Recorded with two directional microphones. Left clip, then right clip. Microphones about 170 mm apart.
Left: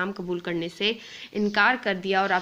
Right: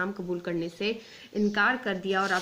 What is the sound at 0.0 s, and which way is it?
Speech, 25° left (ahead or behind).